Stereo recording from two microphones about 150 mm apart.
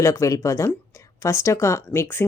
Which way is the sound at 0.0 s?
20° left (ahead or behind).